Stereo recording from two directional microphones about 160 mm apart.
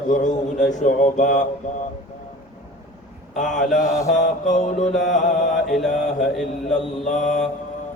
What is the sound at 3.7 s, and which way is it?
A man's voice, 50° left (ahead or behind).